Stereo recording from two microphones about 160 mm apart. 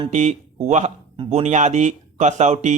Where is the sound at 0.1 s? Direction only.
45° right (ahead or behind).